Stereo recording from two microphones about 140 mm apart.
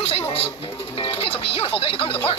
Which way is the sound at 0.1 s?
45° left (ahead or behind).